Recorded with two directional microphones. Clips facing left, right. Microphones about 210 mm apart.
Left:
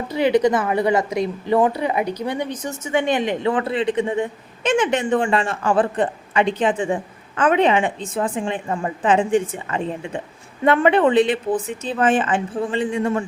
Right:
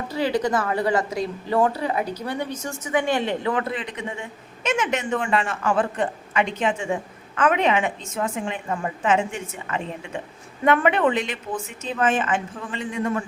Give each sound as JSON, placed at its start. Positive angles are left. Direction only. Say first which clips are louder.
{"t": 0.1, "sound": "a woman's voice", "louder": "left 6 dB", "side_deg": 20}
{"t": 3.5, "sound": "speech", "louder": "left 6 dB", "side_deg": 30}